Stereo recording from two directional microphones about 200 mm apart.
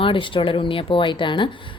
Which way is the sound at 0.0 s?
25° left (ahead or behind).